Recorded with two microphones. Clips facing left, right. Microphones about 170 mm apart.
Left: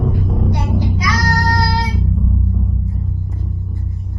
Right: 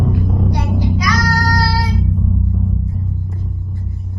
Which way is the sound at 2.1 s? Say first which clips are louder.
Right 1 dB; centre (ahead or behind).